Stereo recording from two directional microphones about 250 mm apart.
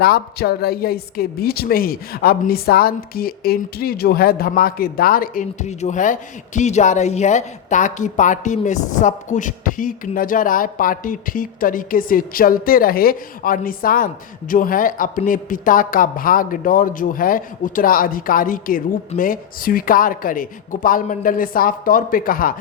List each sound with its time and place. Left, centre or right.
0.0 s a woman's voice: left